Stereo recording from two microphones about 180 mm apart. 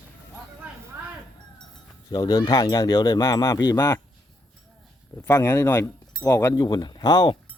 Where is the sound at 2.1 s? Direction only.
20° left (ahead or behind).